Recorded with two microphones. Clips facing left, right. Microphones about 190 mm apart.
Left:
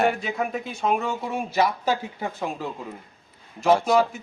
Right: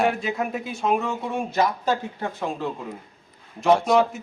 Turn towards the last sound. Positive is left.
turn(degrees=0)  # may be behind; listen again after turning